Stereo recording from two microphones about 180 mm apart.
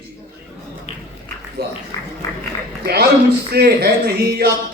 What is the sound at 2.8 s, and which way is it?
Speech, 60° right (ahead or behind).